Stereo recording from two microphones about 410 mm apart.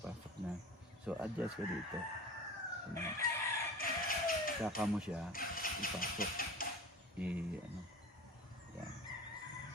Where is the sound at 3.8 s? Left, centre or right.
Left.